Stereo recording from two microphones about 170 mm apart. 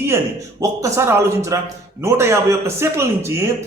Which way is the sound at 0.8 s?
15° right (ahead or behind).